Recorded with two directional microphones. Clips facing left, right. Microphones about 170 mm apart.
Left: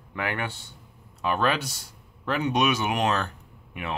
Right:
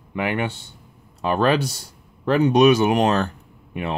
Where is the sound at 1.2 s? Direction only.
35° right (ahead or behind).